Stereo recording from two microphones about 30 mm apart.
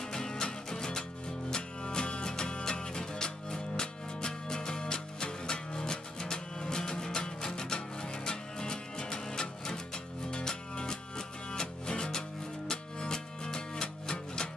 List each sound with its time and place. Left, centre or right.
0.0 s music: left